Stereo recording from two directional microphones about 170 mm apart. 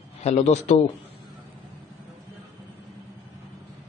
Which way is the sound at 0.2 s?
40° left (ahead or behind).